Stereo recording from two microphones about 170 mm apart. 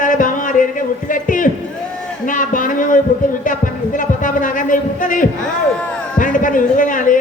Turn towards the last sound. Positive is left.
turn(degrees=50)  # may be behind; listen again after turning